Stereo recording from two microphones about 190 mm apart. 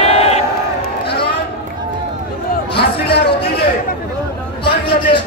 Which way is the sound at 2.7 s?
60° left (ahead or behind).